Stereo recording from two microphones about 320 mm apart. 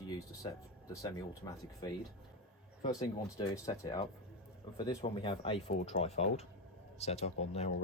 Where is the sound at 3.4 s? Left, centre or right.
Centre.